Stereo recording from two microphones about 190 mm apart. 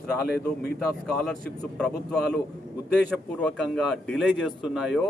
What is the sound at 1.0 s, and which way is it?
A man's voice, 5° left (ahead or behind).